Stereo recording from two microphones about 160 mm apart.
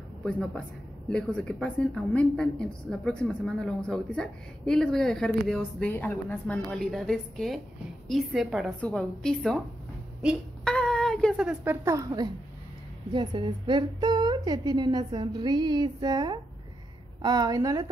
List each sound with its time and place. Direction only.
0.2 s a woman's voice: 5° left (ahead or behind)
10.6 s a sound: 5° left (ahead or behind); by 12.3 s 25° right (ahead or behind)
13.1 s a woman's voice: 30° right (ahead or behind)